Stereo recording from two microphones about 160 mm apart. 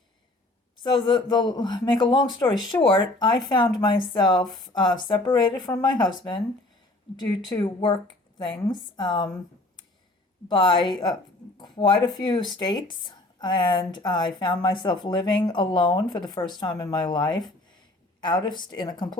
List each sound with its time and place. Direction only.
0.8 s speech: 30° left (ahead or behind)
7.5 s speech: 30° left (ahead or behind)
9.0 s speech: 30° left (ahead or behind)
10.5 s speech: 30° left (ahead or behind)